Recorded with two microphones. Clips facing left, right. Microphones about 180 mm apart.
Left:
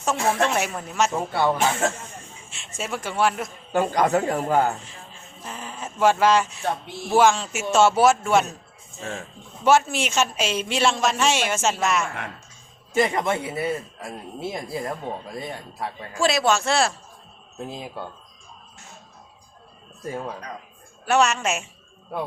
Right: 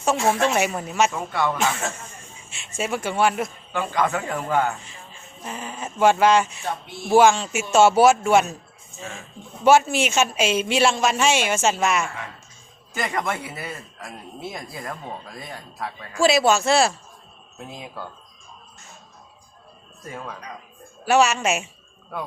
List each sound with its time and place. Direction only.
0.0 s a woman's voice: centre (ahead or behind)
1.1 s a man's voice: 30° left (ahead or behind)
2.5 s a woman's voice: centre (ahead or behind)
3.7 s a man's voice: 40° left (ahead or behind)
5.4 s a sound: 5° right (ahead or behind)
7.2 s a woman's voice: centre (ahead or behind)
9.6 s a woman's voice: centre (ahead or behind)
12.9 s speech: 25° left (ahead or behind)
16.2 s a woman's voice: 5° right (ahead or behind)
17.7 s speech: 30° left (ahead or behind)
20.0 s a man's voice: 30° left (ahead or behind)
21.0 s a woman's voice: 5° right (ahead or behind)